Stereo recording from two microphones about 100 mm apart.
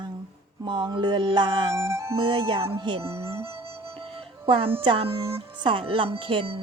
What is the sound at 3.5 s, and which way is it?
Music, 65° right (ahead or behind).